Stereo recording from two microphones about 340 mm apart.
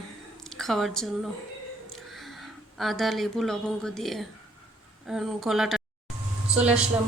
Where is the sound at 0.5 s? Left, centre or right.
Centre.